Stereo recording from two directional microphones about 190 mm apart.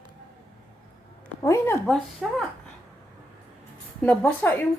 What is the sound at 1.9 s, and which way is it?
Speech, centre (ahead or behind).